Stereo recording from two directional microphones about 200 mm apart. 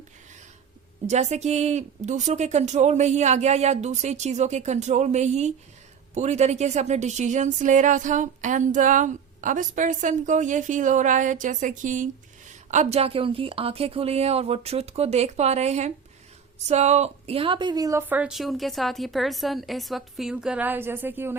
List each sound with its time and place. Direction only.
1.0 s a woman's voice: 35° right (ahead or behind); by 21.3 s 10° right (ahead or behind)